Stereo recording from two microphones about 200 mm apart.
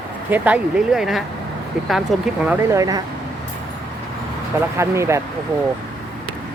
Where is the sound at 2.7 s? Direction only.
15° right (ahead or behind).